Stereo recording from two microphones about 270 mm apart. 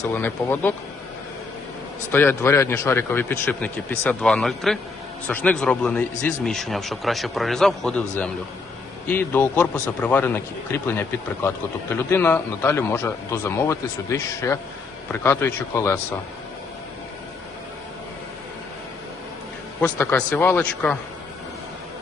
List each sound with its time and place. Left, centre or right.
0.1 s a man's voice: centre
2.1 s a man's voice: centre
9.0 s a man's voice: centre
12.1 s a man's voice: centre
19.8 s a man's voice: centre